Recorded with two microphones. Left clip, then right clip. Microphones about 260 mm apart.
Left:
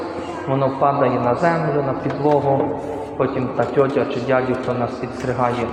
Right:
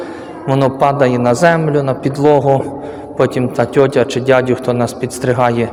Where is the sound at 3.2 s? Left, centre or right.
Right.